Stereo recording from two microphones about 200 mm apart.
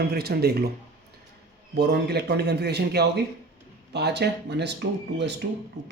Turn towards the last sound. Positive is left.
turn(degrees=-60)  # may be behind; listen again after turning